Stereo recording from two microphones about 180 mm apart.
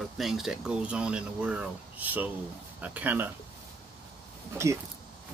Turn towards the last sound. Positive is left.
turn(degrees=-15)  # may be behind; listen again after turning